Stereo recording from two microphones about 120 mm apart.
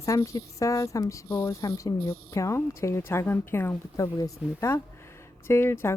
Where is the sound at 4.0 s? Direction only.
30° left (ahead or behind).